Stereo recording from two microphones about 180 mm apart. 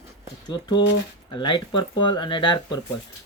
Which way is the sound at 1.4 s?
25° left (ahead or behind).